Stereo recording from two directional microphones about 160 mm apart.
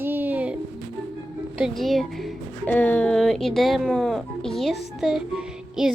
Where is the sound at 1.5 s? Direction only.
Centre (ahead or behind).